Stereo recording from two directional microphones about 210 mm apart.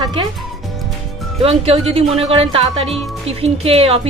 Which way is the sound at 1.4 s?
30° right (ahead or behind).